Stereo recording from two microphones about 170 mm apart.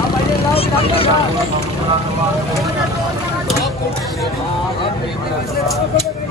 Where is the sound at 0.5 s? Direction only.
35° left (ahead or behind).